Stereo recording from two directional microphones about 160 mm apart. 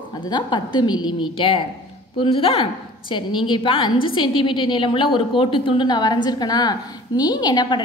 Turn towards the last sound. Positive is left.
turn(degrees=25)  # may be behind; listen again after turning